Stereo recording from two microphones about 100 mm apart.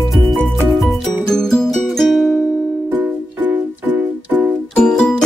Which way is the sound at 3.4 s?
15° right (ahead or behind).